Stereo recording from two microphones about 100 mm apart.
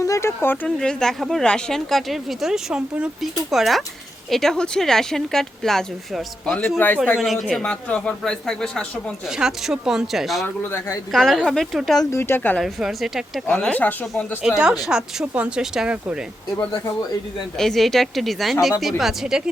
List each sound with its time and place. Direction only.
0.0 s speech: 30° left (ahead or behind)
0.8 s a man's voice: 5° left (ahead or behind)
6.6 s speech: 20° left (ahead or behind)
7.2 s speech: centre (ahead or behind)
7.7 s a man's voice: 10° left (ahead or behind)
9.3 s speech: 5° right (ahead or behind)
10.4 s speech: 20° left (ahead or behind)
11.1 s speech: 5° left (ahead or behind)
12.1 s speech: 25° left (ahead or behind)
12.5 s speech: centre (ahead or behind)
13.6 s a man's voice: 15° left (ahead or behind)
14.4 s speech: 5° right (ahead or behind)
17.6 s speech: centre (ahead or behind)